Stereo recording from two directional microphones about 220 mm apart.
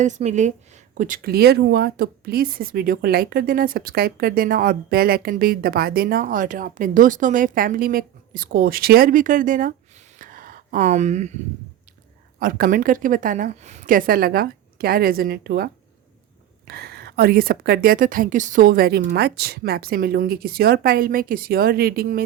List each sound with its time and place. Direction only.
0.0 s speech: 30° right (ahead or behind)
10.2 s a sound: 40° right (ahead or behind)
12.4 s speech: 40° right (ahead or behind)